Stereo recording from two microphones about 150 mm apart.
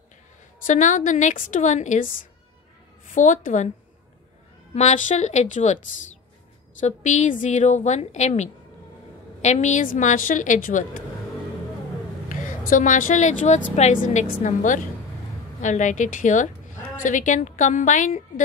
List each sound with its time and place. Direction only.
0.7 s a woman's voice: 60° left (ahead or behind)
4.7 s a woman's voice: 55° left (ahead or behind)
6.8 s a woman's voice: 55° left (ahead or behind)
12.3 s a woman's voice: 60° left (ahead or behind)